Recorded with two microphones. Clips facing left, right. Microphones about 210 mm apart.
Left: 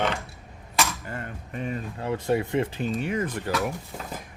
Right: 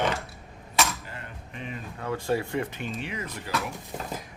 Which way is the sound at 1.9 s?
25° left (ahead or behind).